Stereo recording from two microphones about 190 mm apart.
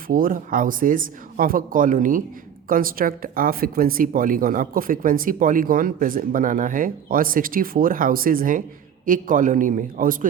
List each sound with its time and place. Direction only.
0.1 s speech: 45° right (ahead or behind)